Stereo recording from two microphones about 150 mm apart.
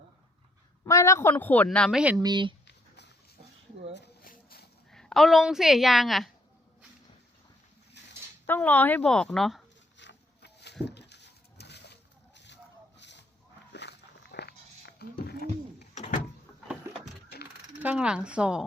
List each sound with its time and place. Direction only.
0.9 s speech: 20° left (ahead or behind)
2.1 s speech: 30° right (ahead or behind)
4.0 s a sound: 85° left
4.9 s a woman's voice: 5° left (ahead or behind)
8.4 s speech: 10° left (ahead or behind)
10.4 s a sound: 90° left
14.3 s a sound: 90° left
15.2 s bird: 90° left
17.8 s speech: 5° right (ahead or behind)